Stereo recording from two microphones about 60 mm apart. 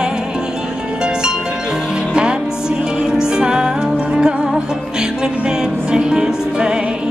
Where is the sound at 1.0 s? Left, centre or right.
Centre.